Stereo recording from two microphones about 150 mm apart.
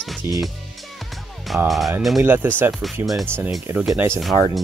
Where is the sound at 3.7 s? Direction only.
15° right (ahead or behind).